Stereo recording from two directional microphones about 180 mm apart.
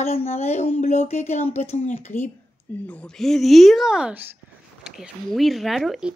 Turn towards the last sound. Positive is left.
turn(degrees=-5)  # may be behind; listen again after turning